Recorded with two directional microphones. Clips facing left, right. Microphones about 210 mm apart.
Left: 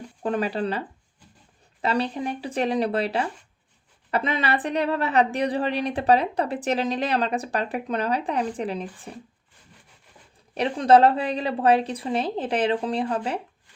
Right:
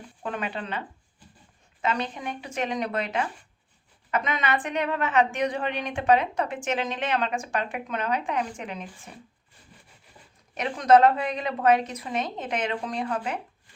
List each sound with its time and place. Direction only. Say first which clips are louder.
0.2 s a woman's voice: left 7 dB; 35° left (ahead or behind)
1.8 s a woman's voice: left 4 dB; 35° left (ahead or behind)
10.5 s a woman's voice: left 2 dB; 30° left (ahead or behind)